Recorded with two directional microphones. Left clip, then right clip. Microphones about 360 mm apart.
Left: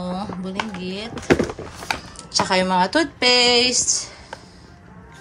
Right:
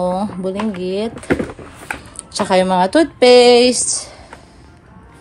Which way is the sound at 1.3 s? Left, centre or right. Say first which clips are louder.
Left 1 dB; left.